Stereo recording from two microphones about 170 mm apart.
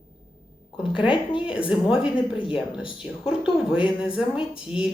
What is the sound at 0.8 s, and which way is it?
Speech, 30° left (ahead or behind).